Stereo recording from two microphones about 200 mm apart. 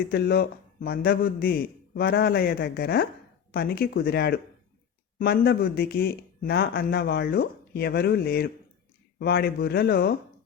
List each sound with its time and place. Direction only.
0.1 s a man's voice: 50° left (ahead or behind)